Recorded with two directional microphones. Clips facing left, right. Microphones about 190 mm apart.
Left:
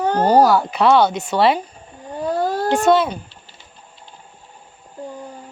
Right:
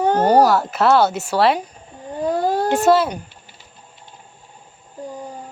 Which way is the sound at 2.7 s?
5° right (ahead or behind).